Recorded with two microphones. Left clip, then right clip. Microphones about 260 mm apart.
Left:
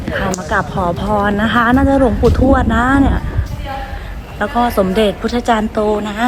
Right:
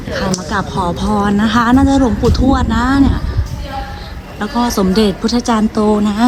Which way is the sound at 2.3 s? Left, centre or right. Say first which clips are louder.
Left 2 dB; centre.